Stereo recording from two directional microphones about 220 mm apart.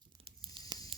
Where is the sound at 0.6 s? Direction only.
20° right (ahead or behind).